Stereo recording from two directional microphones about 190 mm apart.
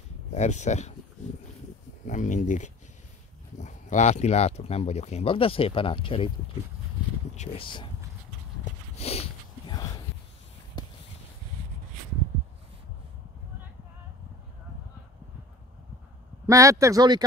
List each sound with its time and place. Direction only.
0.3 s speech: 35° left (ahead or behind)
2.0 s speech: 40° left (ahead or behind)
7.3 s speech: 30° left (ahead or behind)
8.9 s a sound: 30° left (ahead or behind)
16.4 s a man's voice: 15° right (ahead or behind)